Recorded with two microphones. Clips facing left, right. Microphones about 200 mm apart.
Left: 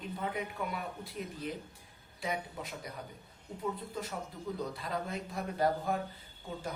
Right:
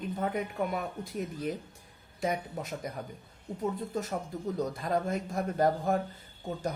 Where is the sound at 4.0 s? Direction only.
45° right (ahead or behind).